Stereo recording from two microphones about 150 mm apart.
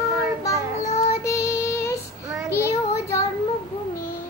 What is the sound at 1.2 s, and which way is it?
Child singing, 20° left (ahead or behind).